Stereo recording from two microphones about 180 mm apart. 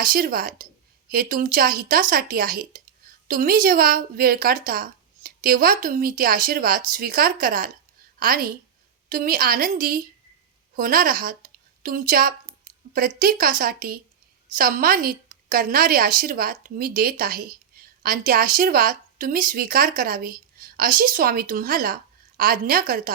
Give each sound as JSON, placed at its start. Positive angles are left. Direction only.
{"t": 0.0, "sound": "a woman's voice", "side_deg": -50}
{"t": 10.8, "sound": "a sound", "side_deg": -50}
{"t": 13.1, "sound": "a woman's voice", "side_deg": -50}